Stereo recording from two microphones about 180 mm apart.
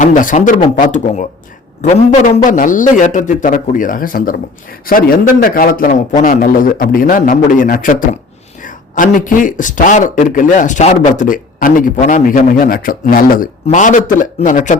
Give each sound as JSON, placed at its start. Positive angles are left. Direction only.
{"t": 0.0, "sound": "speech", "side_deg": 45}